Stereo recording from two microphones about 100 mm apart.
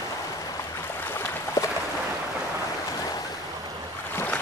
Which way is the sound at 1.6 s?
30° left (ahead or behind).